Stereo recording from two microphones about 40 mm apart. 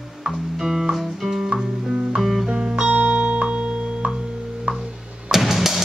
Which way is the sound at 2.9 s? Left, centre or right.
Right.